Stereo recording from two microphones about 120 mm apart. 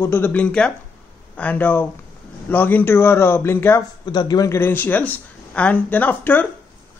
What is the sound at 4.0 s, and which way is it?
Speech, 35° left (ahead or behind).